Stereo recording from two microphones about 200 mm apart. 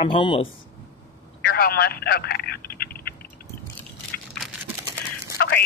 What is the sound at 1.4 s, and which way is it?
Telephone, 50° left (ahead or behind).